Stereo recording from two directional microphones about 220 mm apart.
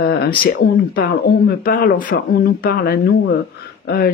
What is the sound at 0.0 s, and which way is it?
Speech, 45° left (ahead or behind).